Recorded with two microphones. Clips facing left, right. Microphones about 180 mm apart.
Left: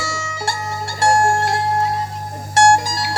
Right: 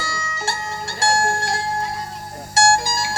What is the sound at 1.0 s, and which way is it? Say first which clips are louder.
Music: left 5 dB; 65° left (ahead or behind).